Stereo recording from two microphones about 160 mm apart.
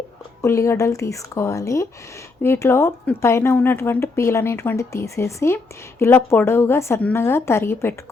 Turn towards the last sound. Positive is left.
turn(degrees=15)  # may be behind; listen again after turning